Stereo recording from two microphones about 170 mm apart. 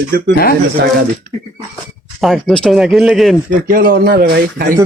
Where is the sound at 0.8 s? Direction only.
75° right (ahead or behind).